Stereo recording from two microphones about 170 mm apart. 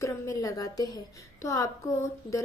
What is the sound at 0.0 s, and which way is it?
A woman's voice, 20° left (ahead or behind).